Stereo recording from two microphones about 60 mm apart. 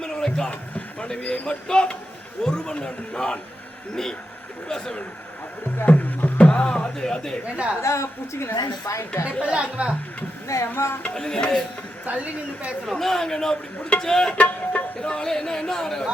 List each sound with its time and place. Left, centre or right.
0.0 s music: centre
1.0 s a man's voice: centre
4.7 s a man's voice: centre
5.8 s a sound: left; by 7.3 s centre
7.5 s a woman's voice: centre
7.8 s a woman's voice: left
8.5 s a woman's voice: left
9.4 s a woman's voice: centre
10.7 s speech: left
11.1 s a man's voice: centre
12.0 s a woman's voice: right
12.8 s a man's voice: centre
14.3 s music: left
15.0 s a man's voice: centre